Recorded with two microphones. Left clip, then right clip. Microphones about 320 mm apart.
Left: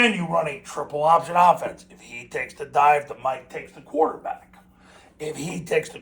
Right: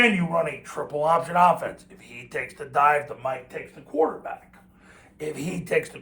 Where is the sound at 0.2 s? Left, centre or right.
Centre.